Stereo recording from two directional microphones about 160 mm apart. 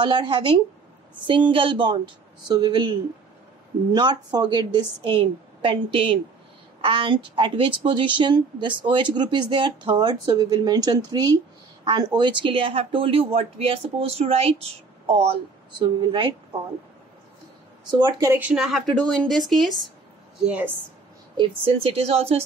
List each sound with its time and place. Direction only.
0.0 s a woman's voice: 30° right (ahead or behind)
17.9 s a woman's voice: 25° right (ahead or behind)
18.3 s a woman's voice: 10° right (ahead or behind)
21.4 s speech: 40° right (ahead or behind)